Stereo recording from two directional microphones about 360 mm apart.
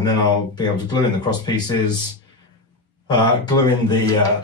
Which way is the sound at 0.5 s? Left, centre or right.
Centre.